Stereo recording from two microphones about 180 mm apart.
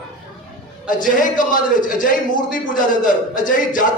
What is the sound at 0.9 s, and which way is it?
A man's voice, 45° left (ahead or behind).